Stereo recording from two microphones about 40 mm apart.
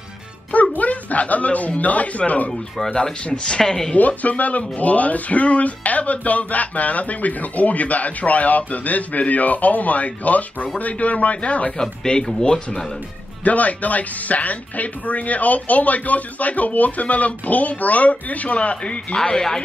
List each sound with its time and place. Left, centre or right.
0.5 s speech: left
2.9 s speech: left
3.5 s speech: centre
3.9 s speech: left
11.8 s speech: centre
13.4 s speech: left
19.1 s speech: centre